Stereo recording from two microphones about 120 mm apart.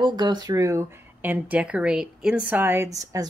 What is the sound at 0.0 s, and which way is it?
A woman's voice, 35° right (ahead or behind).